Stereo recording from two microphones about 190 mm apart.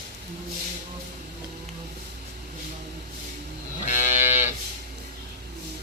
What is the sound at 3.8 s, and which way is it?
Moo, 40° left (ahead or behind).